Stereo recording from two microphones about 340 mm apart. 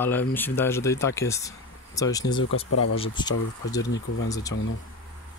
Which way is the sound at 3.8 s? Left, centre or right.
Left.